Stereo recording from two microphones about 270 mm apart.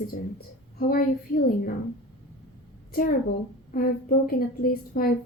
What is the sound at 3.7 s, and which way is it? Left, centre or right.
A woman's voice, left.